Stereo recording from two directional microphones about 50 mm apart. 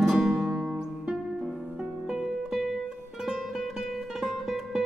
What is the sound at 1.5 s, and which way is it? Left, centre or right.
Music, right.